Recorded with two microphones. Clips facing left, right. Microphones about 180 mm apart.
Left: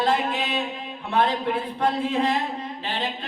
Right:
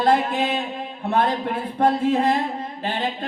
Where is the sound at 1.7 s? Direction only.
50° right (ahead or behind).